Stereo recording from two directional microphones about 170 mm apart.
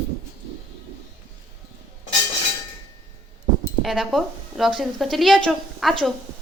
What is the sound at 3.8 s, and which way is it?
A woman's voice, centre (ahead or behind).